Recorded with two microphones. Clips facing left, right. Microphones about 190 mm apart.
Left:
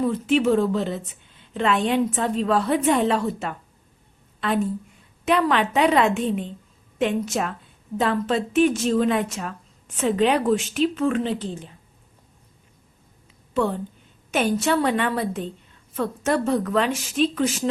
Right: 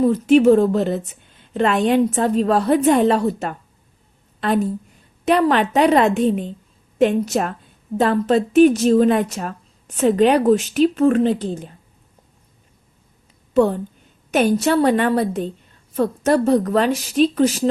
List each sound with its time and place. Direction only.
0.0 s a woman's voice: 40° right (ahead or behind)
13.5 s a woman's voice: 40° right (ahead or behind)